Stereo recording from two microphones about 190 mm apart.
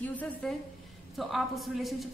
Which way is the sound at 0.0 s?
10° left (ahead or behind).